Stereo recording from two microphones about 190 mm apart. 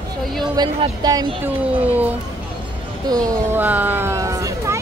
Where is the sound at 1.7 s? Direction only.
10° right (ahead or behind).